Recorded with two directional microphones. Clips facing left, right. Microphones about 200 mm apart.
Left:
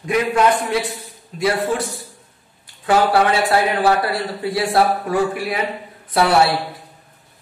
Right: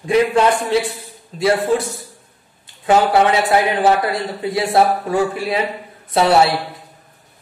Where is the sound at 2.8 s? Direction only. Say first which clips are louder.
Right 2 dB; 20° right (ahead or behind).